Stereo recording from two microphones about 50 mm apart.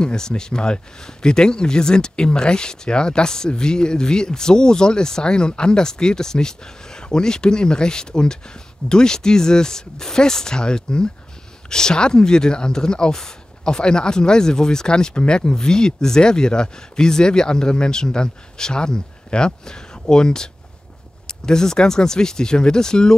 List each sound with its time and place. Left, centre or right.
0.0 s speech: centre